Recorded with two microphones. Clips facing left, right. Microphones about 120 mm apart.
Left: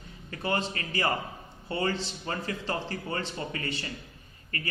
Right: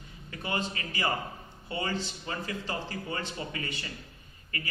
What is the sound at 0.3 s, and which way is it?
A man's voice, 35° left (ahead or behind).